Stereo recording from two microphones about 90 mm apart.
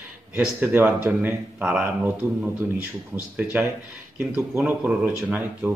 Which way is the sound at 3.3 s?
20° right (ahead or behind).